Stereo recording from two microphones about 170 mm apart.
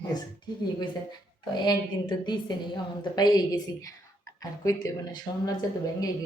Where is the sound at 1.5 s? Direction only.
25° left (ahead or behind).